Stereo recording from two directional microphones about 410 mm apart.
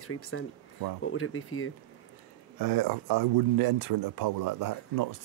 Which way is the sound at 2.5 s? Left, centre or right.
Right.